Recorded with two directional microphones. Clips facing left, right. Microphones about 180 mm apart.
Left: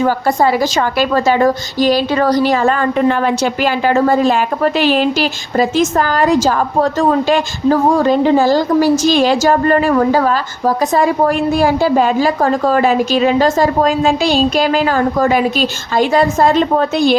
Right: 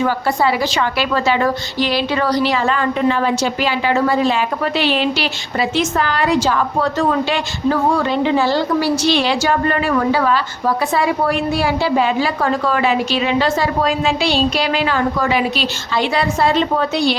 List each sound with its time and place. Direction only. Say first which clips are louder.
0.0 s a woman's voice: left 4 dB; 45° left (ahead or behind)